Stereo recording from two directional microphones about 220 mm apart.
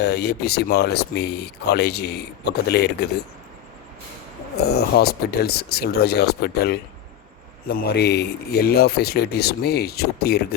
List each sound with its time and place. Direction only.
0.0 s speech: 50° left (ahead or behind)
4.5 s speech: 45° left (ahead or behind)